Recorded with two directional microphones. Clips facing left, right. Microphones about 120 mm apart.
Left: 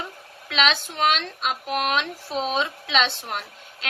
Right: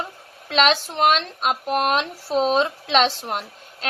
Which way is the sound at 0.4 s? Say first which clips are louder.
Right 4 dB; 40° right (ahead or behind).